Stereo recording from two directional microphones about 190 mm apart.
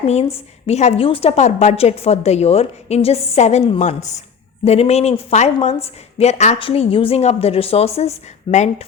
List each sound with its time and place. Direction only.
0.0 s a woman's voice: 35° left (ahead or behind)